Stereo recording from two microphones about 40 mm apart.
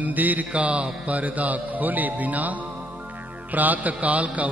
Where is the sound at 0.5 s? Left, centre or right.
Right.